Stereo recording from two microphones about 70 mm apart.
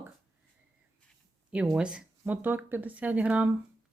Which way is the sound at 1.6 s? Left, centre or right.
Centre.